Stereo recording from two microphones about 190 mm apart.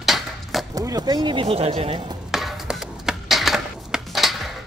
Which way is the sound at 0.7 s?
20° right (ahead or behind).